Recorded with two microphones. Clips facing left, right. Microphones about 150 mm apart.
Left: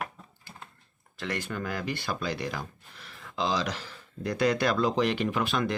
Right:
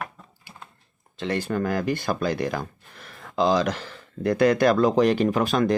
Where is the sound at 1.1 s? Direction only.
25° right (ahead or behind).